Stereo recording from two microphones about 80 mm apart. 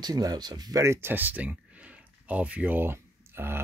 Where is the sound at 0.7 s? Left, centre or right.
Right.